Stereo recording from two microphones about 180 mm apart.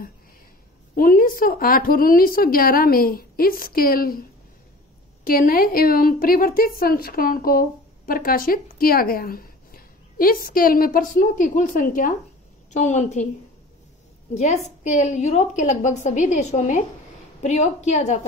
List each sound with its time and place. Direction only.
0.9 s a woman's voice: 50° left (ahead or behind)
14.3 s a woman's voice: 40° left (ahead or behind)